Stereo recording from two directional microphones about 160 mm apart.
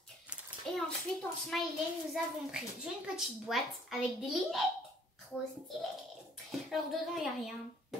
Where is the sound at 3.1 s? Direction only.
Centre (ahead or behind).